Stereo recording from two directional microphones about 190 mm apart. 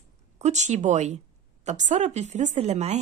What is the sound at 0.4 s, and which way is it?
A woman's voice, 35° right (ahead or behind).